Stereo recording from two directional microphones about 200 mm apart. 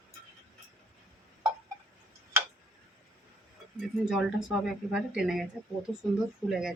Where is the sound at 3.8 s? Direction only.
5° right (ahead or behind).